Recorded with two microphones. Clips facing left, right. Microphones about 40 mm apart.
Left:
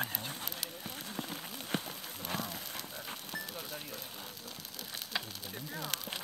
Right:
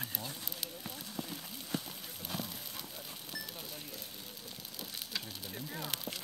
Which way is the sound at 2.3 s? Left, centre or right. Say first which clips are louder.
Left 3 dB; left.